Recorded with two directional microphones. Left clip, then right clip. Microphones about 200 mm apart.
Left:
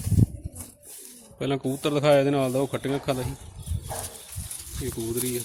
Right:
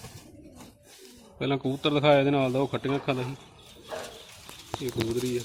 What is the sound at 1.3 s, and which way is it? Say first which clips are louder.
A man's voice: left 1 dB; 25° left (ahead or behind).